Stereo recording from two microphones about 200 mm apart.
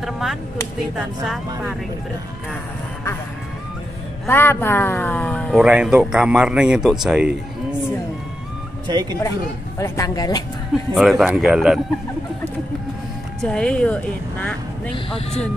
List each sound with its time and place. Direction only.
0.0 s a sound: centre (ahead or behind)
0.9 s a man's voice: 5° right (ahead or behind)
4.3 s speech: 10° left (ahead or behind)
5.6 s a man's voice: 5° right (ahead or behind)
8.8 s speech: 20° right (ahead or behind)
9.8 s speech: 15° left (ahead or behind)
10.7 s a man's voice: centre (ahead or behind)
13.4 s a man's voice: 5° left (ahead or behind)
15.0 s speech: 30° left (ahead or behind)